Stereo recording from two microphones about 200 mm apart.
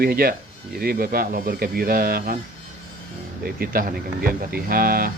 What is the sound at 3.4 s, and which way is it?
Speech, 50° right (ahead or behind).